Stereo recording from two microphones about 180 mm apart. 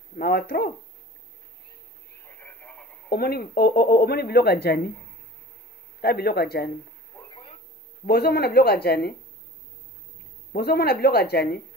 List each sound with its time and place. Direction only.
0.1 s speech: 60° left (ahead or behind)
2.2 s radio: 10° left (ahead or behind)
3.1 s speech: 60° left (ahead or behind)
5.9 s speech: 60° left (ahead or behind)
7.2 s radio: 25° left (ahead or behind)
8.1 s speech: 60° left (ahead or behind)
10.5 s speech: 60° left (ahead or behind)